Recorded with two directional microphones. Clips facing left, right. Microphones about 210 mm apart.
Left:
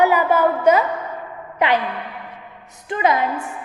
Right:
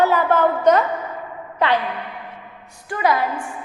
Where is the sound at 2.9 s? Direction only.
20° left (ahead or behind).